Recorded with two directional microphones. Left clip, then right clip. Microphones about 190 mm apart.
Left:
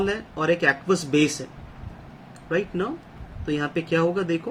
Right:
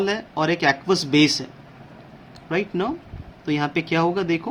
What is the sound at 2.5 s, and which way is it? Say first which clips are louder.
Speech: right 2 dB; 40° right (ahead or behind).